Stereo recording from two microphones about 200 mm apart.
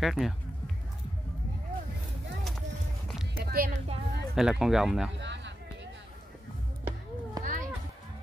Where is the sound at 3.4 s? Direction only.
50° right (ahead or behind).